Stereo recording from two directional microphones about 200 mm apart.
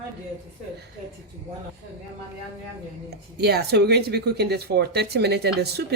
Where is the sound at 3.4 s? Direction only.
55° right (ahead or behind).